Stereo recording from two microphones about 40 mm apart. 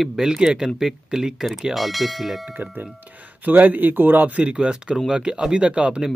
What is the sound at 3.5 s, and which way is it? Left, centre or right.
Speech, right.